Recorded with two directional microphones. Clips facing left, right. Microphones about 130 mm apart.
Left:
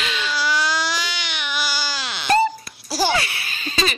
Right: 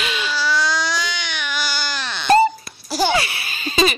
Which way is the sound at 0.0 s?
10° right (ahead or behind).